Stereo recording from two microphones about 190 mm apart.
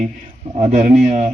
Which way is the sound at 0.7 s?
40° right (ahead or behind).